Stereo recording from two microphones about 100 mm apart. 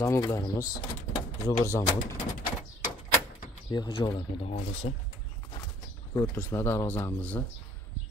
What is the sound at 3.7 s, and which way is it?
Speech, 45° left (ahead or behind).